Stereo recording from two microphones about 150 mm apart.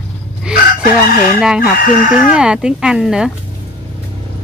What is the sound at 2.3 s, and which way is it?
Speech, 5° right (ahead or behind).